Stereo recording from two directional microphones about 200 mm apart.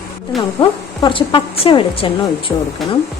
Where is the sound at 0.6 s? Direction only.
20° left (ahead or behind).